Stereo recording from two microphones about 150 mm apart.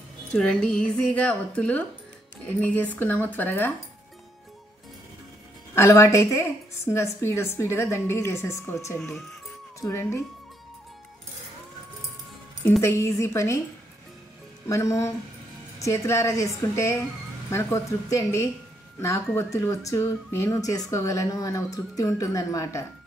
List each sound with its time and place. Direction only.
0.3 s a woman's voice: 5° left (ahead or behind)
5.8 s a woman's voice: 20° left (ahead or behind)
12.8 s speech: 20° left (ahead or behind)
14.7 s speech: 20° left (ahead or behind)
17.5 s speech: 15° left (ahead or behind)